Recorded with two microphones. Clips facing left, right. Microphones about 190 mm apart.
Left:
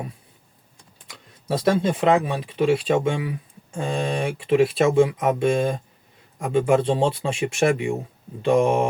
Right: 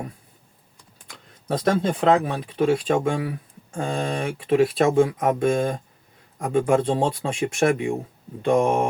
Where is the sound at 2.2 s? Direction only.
45° right (ahead or behind).